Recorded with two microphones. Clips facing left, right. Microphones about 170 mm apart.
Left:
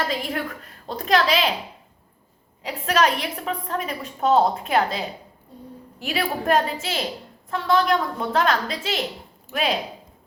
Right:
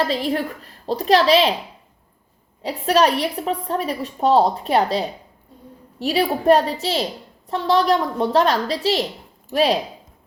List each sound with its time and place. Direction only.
0.1 s a woman's voice: 30° right (ahead or behind)
2.6 s a woman's voice: 35° right (ahead or behind)